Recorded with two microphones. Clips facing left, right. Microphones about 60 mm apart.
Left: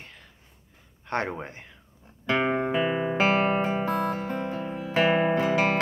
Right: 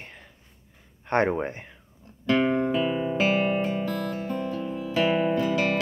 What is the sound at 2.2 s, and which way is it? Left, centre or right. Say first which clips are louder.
Music: right 2 dB; left.